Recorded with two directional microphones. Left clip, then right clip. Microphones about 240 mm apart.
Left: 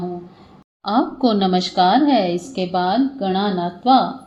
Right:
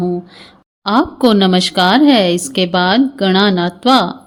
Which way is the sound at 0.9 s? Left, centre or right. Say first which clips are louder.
Right 6 dB; right.